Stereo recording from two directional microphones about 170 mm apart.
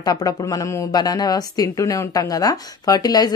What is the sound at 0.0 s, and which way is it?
A woman's voice, 20° left (ahead or behind).